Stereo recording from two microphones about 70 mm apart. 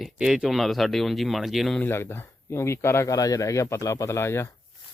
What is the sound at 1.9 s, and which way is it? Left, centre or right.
Speech, left.